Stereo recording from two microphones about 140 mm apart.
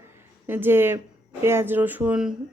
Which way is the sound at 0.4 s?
15° right (ahead or behind).